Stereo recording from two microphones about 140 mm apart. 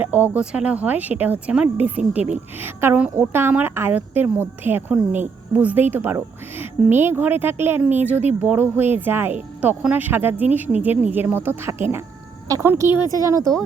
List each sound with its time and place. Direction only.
0.0 s a woman's voice: 10° right (ahead or behind)